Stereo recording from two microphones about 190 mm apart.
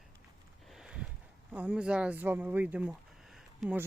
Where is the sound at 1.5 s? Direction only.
5° right (ahead or behind).